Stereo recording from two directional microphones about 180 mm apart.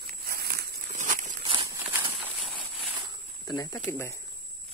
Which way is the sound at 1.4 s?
25° right (ahead or behind).